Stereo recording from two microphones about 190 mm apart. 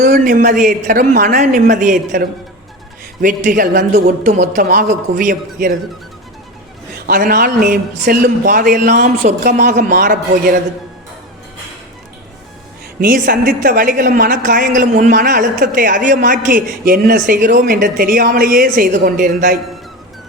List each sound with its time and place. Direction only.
0.0 s a woman's voice: 45° right (ahead or behind)
7.1 s a woman's voice: 45° right (ahead or behind)
9.6 s a woman's voice: 40° right (ahead or behind)
13.0 s a woman's voice: 45° right (ahead or behind)